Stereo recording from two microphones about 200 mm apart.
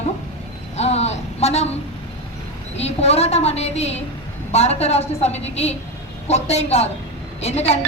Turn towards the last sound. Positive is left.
turn(degrees=30)  # may be behind; listen again after turning